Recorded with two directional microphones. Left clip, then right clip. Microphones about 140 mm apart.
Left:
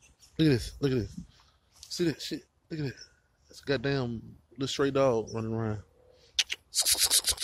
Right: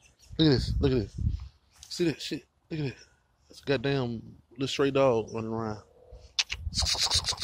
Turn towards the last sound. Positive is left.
turn(degrees=25)  # may be behind; listen again after turning